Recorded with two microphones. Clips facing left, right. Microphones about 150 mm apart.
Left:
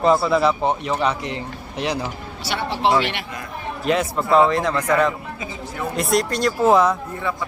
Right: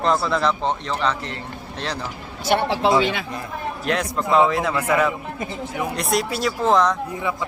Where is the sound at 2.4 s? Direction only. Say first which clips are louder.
Right 7 dB; 55° right (ahead or behind).